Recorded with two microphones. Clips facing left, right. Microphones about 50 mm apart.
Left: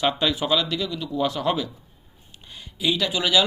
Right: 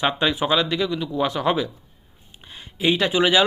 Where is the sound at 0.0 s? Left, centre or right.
Right.